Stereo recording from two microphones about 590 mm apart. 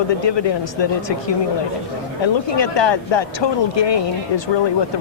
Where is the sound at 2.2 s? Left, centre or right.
Left.